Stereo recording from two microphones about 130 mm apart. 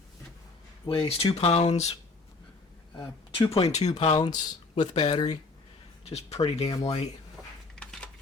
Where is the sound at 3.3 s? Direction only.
45° left (ahead or behind).